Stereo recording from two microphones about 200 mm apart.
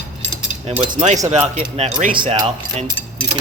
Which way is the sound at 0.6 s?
35° right (ahead or behind).